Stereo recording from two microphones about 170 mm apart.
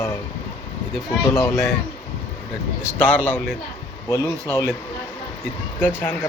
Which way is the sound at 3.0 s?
10° left (ahead or behind).